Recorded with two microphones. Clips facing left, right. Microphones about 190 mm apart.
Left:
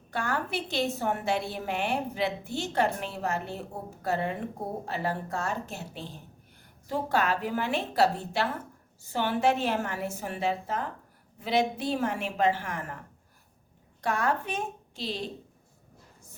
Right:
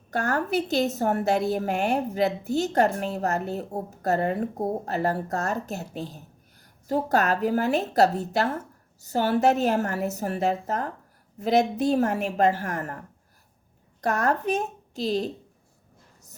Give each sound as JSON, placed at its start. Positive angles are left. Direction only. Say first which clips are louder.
{"t": 0.1, "sound": "a woman's voice", "louder": "right 6 dB", "side_deg": -45}